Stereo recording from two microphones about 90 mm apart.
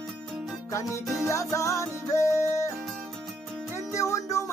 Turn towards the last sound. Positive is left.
turn(degrees=35)  # may be behind; listen again after turning